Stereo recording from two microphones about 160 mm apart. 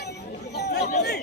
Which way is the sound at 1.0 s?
90° left.